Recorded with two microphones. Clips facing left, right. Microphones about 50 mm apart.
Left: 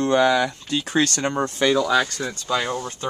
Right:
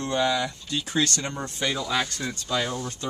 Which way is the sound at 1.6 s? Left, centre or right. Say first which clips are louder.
Left 8 dB; left.